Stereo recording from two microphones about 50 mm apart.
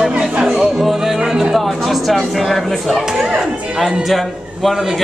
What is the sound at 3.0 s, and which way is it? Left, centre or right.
Speech, centre.